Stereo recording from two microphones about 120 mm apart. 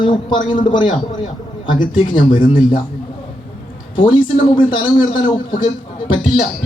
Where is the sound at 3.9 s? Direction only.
45° left (ahead or behind).